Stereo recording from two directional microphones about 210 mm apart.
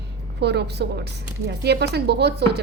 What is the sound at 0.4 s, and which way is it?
A woman's voice, 50° right (ahead or behind).